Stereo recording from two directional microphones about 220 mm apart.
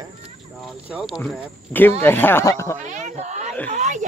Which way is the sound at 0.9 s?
Centre (ahead or behind).